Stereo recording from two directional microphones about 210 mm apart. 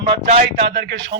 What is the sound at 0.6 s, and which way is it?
Speech, 55° right (ahead or behind).